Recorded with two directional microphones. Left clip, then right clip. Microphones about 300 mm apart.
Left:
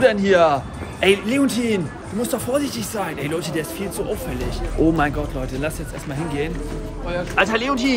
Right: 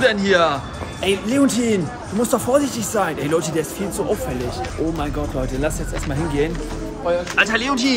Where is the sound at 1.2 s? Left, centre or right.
Centre.